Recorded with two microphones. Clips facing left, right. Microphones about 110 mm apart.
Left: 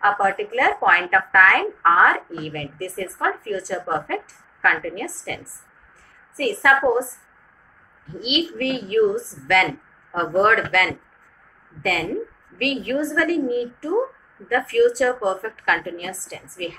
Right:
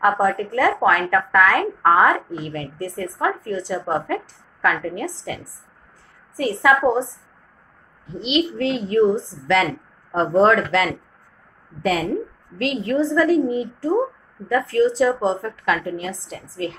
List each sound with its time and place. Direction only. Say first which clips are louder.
0.0 s a woman's voice: right 1 dB; 20° right (ahead or behind)
8.1 s a woman's voice: right 3 dB; 25° right (ahead or behind)